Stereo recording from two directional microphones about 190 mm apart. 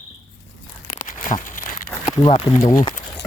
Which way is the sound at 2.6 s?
20° left (ahead or behind).